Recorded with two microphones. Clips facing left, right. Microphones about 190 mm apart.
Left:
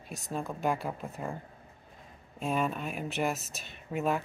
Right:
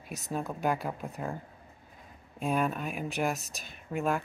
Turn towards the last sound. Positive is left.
turn(degrees=0)  # may be behind; listen again after turning